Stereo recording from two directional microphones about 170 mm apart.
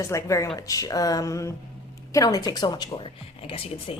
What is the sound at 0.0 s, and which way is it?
Speech, 20° left (ahead or behind).